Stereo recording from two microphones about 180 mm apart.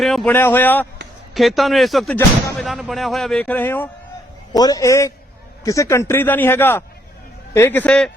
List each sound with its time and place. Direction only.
0.0 s speech: centre (ahead or behind)
0.3 s a man's voice: 10° left (ahead or behind)
1.3 s speech: centre (ahead or behind)
4.5 s a man's voice: 20° left (ahead or behind); by 8.1 s 5° left (ahead or behind)